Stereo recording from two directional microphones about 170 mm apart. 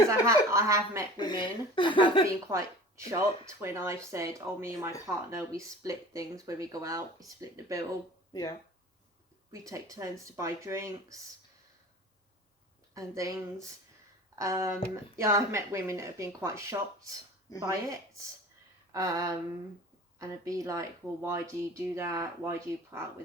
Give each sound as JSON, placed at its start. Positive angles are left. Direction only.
{"t": 0.1, "sound": "speech", "side_deg": -15}
{"t": 1.1, "sound": "speech", "side_deg": 25}
{"t": 2.5, "sound": "speech", "side_deg": -15}
{"t": 8.3, "sound": "speech", "side_deg": 20}
{"t": 9.5, "sound": "speech", "side_deg": -20}
{"t": 12.9, "sound": "speech", "side_deg": -20}
{"t": 18.9, "sound": "a sound", "side_deg": -20}
{"t": 20.1, "sound": "speech", "side_deg": -20}